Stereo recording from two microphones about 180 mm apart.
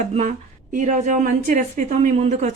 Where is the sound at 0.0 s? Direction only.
40° right (ahead or behind).